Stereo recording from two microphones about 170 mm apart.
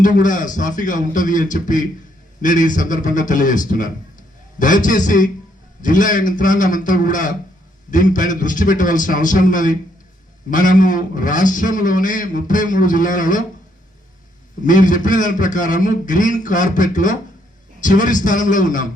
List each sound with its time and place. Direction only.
0.0 s a man's voice: 50° left (ahead or behind)
14.6 s a man's voice: 50° left (ahead or behind)